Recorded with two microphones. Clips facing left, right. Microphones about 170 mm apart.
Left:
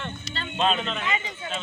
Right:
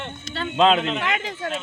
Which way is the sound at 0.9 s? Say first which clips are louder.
Right 4 dB; 75° right (ahead or behind).